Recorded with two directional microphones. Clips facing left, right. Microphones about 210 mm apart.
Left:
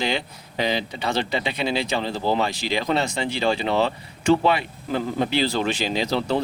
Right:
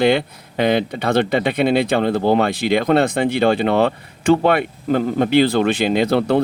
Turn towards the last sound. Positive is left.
turn(degrees=-60)  # may be behind; listen again after turning